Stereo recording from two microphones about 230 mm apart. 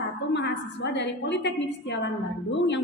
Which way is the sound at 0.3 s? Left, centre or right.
Left.